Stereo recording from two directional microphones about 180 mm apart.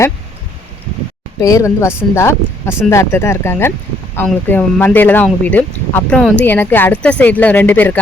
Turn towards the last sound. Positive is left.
turn(degrees=10)  # may be behind; listen again after turning